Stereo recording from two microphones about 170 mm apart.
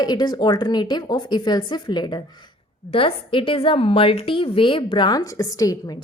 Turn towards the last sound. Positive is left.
turn(degrees=20)  # may be behind; listen again after turning